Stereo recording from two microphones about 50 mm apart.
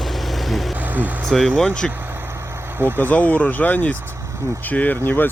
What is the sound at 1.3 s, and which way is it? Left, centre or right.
Speech, centre.